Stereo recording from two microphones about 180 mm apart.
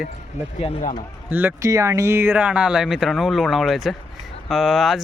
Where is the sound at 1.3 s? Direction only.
10° right (ahead or behind).